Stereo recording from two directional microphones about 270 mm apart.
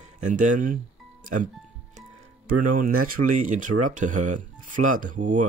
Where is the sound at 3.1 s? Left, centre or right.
Right.